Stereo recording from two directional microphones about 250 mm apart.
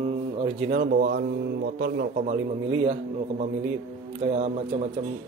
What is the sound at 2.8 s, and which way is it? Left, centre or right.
A man's voice, right.